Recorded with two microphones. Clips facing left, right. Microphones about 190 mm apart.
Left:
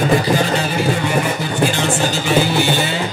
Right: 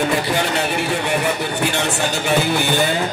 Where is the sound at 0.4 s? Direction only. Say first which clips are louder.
Left 2 dB; 65° right (ahead or behind).